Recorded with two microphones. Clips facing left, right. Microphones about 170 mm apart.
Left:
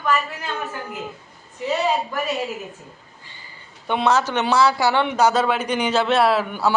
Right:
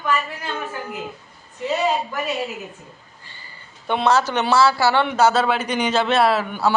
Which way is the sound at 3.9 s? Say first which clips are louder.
Right 1 dB; 15° left (ahead or behind).